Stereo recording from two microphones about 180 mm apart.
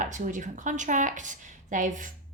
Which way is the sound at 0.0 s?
45° right (ahead or behind).